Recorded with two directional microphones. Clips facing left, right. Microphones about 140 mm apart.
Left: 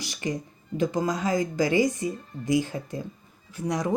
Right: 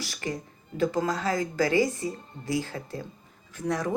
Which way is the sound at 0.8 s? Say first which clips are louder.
Left 1 dB; 15° left (ahead or behind).